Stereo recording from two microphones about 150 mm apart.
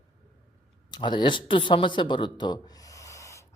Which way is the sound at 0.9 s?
30° left (ahead or behind).